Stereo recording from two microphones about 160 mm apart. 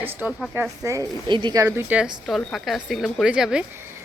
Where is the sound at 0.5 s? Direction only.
15° right (ahead or behind).